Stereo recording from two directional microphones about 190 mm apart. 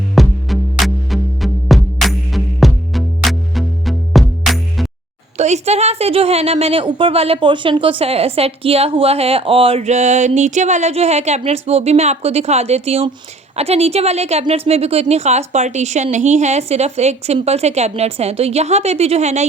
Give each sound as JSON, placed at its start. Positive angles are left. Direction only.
{"t": 0.2, "sound": "music", "side_deg": 0}
{"t": 5.4, "sound": "a woman's voice", "side_deg": -35}